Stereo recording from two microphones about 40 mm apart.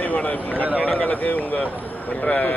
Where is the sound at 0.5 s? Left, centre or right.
Right.